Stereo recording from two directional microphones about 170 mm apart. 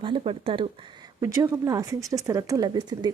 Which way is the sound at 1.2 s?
15° right (ahead or behind).